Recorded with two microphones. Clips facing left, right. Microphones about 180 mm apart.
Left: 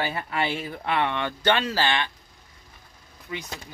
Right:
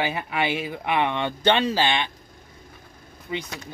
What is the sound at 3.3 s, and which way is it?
Speech, 25° right (ahead or behind).